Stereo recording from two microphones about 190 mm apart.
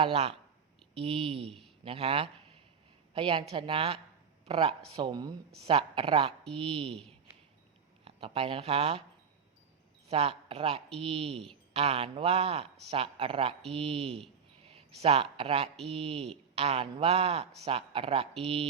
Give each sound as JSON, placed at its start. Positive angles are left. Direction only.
{"t": 0.0, "sound": "a woman's voice", "side_deg": -30}
{"t": 8.0, "sound": "speech", "side_deg": -30}
{"t": 10.1, "sound": "speech", "side_deg": -30}